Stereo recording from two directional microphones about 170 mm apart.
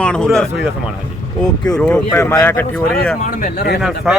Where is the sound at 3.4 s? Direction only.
75° left (ahead or behind).